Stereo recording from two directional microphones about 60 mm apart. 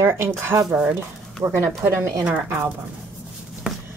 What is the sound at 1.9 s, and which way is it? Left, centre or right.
Speech, right.